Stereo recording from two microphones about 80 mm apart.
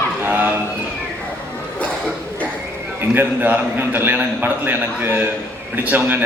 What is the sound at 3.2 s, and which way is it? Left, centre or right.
A man's voice, right.